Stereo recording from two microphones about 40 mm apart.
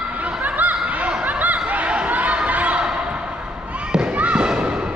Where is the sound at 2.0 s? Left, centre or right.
Right.